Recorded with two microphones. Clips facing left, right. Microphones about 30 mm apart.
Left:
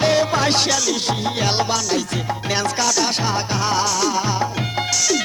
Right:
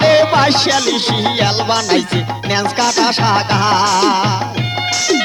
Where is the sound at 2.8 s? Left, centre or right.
Right.